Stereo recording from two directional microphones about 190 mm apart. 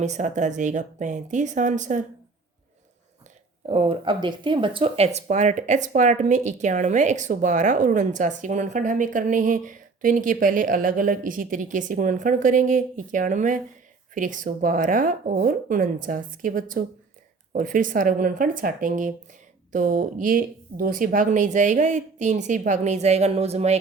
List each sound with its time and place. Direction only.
0.0 s speech: 40° right (ahead or behind)
3.7 s speech: 30° right (ahead or behind)